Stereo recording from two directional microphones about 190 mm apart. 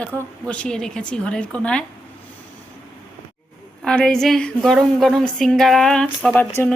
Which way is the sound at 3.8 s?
5° left (ahead or behind).